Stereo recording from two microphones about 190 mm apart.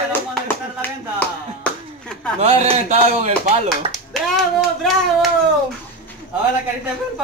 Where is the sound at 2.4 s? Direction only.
35° right (ahead or behind).